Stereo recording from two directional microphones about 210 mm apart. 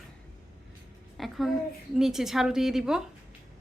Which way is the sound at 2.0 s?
Centre (ahead or behind).